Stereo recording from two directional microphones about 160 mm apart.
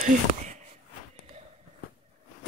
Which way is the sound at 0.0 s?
50° right (ahead or behind).